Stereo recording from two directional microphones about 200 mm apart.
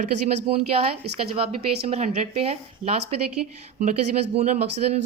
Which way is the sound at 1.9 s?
35° right (ahead or behind).